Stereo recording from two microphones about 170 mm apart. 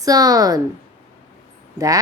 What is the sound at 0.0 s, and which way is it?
Speech, 20° right (ahead or behind).